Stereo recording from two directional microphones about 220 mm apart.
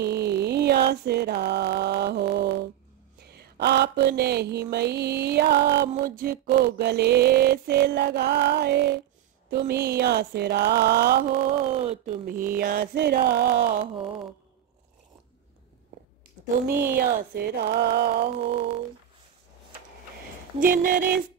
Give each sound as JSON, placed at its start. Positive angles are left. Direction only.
{"t": 0.0, "sound": "a sound", "side_deg": -50}
{"t": 3.3, "sound": "mantra", "side_deg": -45}
{"t": 11.6, "sound": "speech", "side_deg": -30}
{"t": 12.6, "sound": "mantra", "side_deg": -40}
{"t": 13.7, "sound": "speech", "side_deg": -25}
{"t": 16.9, "sound": "mantra", "side_deg": -45}
{"t": 18.4, "sound": "speech", "side_deg": -25}
{"t": 20.6, "sound": "a sound", "side_deg": -40}